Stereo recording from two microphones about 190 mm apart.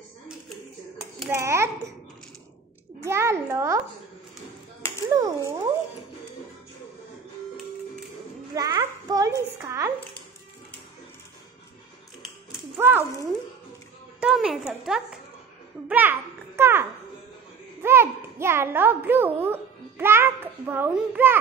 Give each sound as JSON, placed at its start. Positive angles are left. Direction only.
{"t": 1.3, "sound": "a child's voice", "side_deg": -15}
{"t": 3.1, "sound": "a child's voice", "side_deg": -15}
{"t": 5.1, "sound": "a child's voice", "side_deg": -15}
{"t": 8.5, "sound": "a child's voice", "side_deg": -20}
{"t": 12.7, "sound": "a sound", "side_deg": -10}
{"t": 14.2, "sound": "a sound", "side_deg": -5}
{"t": 15.9, "sound": "babbling", "side_deg": -10}
{"t": 17.8, "sound": "babbling", "side_deg": -15}